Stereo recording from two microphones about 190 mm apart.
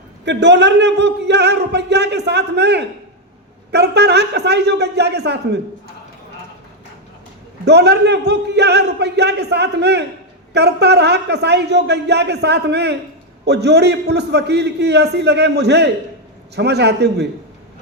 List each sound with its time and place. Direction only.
0.3 s a man's voice: 65° right (ahead or behind)
7.6 s a man's voice: 60° right (ahead or behind)